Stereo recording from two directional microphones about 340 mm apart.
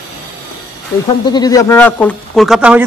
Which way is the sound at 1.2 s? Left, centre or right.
Centre.